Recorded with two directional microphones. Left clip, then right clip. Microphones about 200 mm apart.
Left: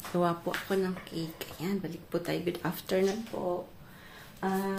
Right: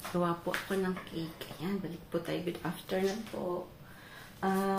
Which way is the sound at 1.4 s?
40° left (ahead or behind).